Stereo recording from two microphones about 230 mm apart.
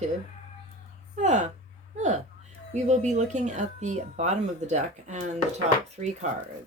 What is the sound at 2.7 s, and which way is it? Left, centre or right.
Speech, right.